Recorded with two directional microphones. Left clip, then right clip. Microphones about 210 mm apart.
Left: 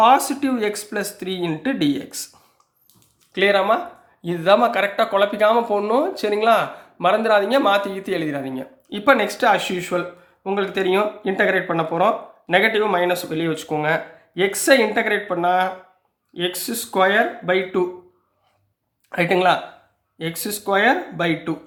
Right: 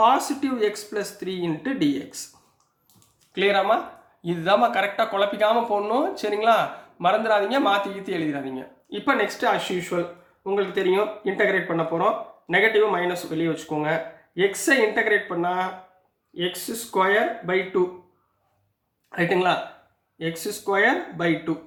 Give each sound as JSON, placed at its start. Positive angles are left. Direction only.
{"t": 0.0, "sound": "speech", "side_deg": 40}
{"t": 3.3, "sound": "speech", "side_deg": 30}
{"t": 19.1, "sound": "speech", "side_deg": 40}